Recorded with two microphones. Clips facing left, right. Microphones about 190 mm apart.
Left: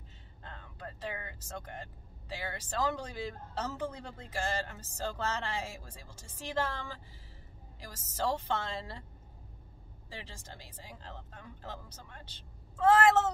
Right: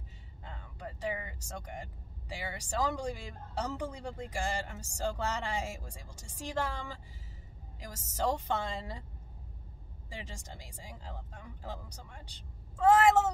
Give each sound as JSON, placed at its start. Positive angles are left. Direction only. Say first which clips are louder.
{"t": 0.4, "sound": "speech", "louder": "right 1 dB", "side_deg": -10}
{"t": 10.0, "sound": "speech", "louder": "right 2 dB", "side_deg": -15}